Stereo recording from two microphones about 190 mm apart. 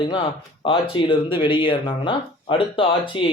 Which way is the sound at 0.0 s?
25° left (ahead or behind).